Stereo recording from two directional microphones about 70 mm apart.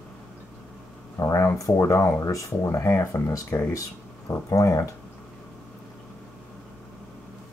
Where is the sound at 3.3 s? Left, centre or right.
Left.